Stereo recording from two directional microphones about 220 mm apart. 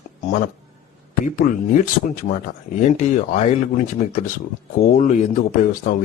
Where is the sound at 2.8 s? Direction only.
30° left (ahead or behind).